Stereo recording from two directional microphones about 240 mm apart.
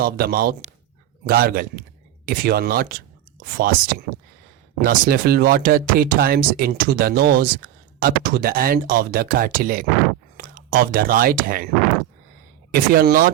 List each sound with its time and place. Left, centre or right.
0.0 s speech: right
12.7 s speech: right